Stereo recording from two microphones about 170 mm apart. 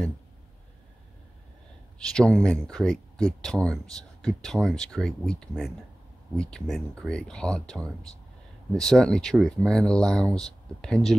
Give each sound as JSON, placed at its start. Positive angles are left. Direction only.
{"t": 2.0, "sound": "speech", "side_deg": 5}
{"t": 6.5, "sound": "speech", "side_deg": 5}